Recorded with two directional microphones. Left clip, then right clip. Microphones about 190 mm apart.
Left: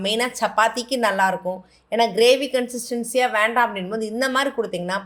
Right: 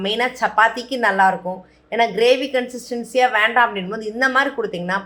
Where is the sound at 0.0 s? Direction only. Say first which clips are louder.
Right 2 dB; 40° left (ahead or behind).